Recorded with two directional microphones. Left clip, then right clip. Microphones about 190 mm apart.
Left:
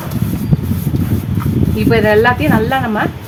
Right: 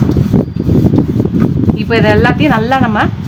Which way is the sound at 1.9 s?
35° right (ahead or behind).